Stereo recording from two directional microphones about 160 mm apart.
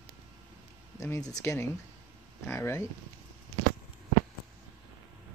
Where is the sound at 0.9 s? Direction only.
20° left (ahead or behind).